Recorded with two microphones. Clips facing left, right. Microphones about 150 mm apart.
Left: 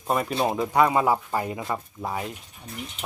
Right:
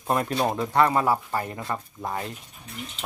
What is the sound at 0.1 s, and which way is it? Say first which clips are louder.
Speech: even; centre (ahead or behind).